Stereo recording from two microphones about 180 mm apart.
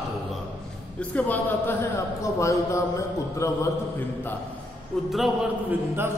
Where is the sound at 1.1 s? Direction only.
10° left (ahead or behind).